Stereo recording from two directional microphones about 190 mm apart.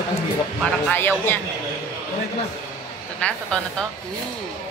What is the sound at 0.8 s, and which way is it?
Speech, 10° left (ahead or behind).